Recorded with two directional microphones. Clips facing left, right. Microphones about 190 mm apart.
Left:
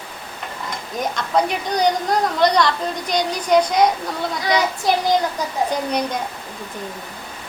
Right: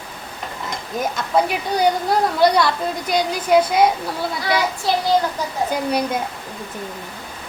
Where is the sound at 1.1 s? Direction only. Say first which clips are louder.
Even; 5° right (ahead or behind).